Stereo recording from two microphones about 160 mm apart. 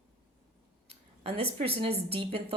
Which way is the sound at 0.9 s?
40° right (ahead or behind).